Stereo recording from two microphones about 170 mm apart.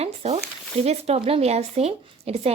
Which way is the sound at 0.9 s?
35° right (ahead or behind).